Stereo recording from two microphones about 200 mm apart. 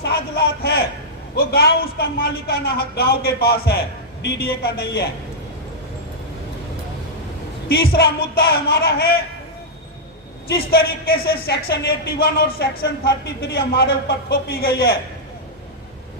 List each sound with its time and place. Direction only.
0.0 s speech: 55° left (ahead or behind)
7.7 s speech: 55° left (ahead or behind)
10.5 s speech: 50° left (ahead or behind)